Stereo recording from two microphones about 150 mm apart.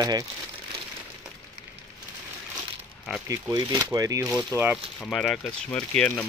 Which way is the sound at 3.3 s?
25° right (ahead or behind).